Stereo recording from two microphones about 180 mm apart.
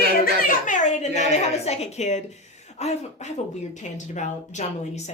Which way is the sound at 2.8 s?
40° left (ahead or behind).